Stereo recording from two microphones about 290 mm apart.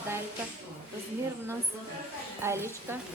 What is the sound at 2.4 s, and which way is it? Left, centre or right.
Speech, centre.